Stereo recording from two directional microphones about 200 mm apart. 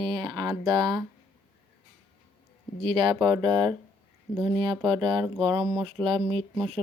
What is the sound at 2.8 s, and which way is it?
Speech, 25° right (ahead or behind).